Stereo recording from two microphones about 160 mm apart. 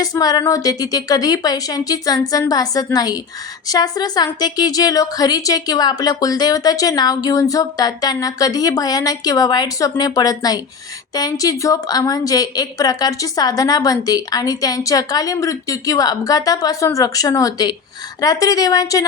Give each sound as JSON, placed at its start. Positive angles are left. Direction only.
{"t": 0.0, "sound": "a woman's voice", "side_deg": 25}